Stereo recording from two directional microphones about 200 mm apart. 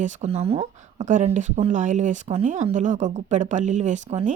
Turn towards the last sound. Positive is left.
turn(degrees=-35)  # may be behind; listen again after turning